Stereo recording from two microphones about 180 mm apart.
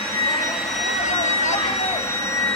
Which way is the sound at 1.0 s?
40° left (ahead or behind).